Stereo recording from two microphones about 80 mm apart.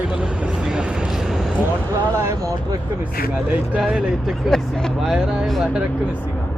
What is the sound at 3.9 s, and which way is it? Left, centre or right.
Speech, centre.